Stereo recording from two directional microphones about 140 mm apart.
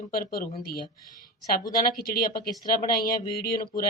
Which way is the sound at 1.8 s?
90° left.